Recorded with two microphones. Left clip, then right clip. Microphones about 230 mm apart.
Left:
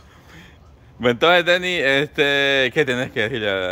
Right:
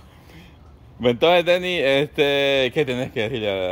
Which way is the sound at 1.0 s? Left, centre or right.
Centre.